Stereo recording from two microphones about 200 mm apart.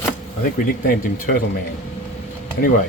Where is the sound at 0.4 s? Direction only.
45° left (ahead or behind).